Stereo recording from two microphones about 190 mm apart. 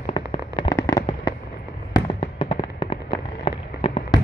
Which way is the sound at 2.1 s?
25° left (ahead or behind).